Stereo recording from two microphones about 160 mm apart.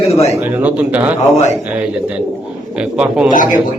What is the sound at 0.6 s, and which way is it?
Speech, 10° right (ahead or behind).